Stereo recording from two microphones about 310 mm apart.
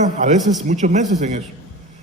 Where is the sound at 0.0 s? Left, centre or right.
Right.